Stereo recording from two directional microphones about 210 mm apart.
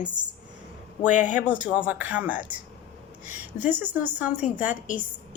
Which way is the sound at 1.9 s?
5° right (ahead or behind).